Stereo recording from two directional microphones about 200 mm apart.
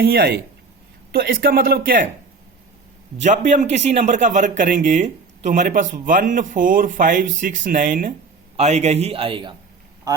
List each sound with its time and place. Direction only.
0.0 s speech: 50° right (ahead or behind)
3.2 s a man's voice: 35° right (ahead or behind); by 10.2 s 20° right (ahead or behind)